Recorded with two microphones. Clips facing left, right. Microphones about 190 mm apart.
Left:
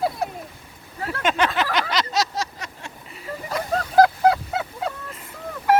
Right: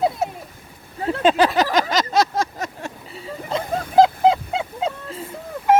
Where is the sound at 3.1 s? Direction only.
30° right (ahead or behind).